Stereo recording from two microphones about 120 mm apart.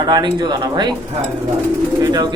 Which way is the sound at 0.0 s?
35° right (ahead or behind).